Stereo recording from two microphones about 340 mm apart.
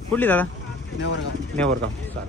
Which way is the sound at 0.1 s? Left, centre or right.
Centre.